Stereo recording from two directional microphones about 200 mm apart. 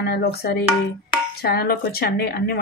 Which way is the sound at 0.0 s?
50° left (ahead or behind).